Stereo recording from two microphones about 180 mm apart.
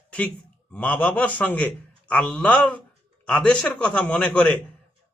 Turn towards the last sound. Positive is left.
turn(degrees=5)  # may be behind; listen again after turning